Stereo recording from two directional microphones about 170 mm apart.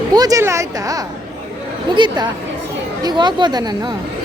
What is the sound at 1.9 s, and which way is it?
A woman's voice, 25° right (ahead or behind).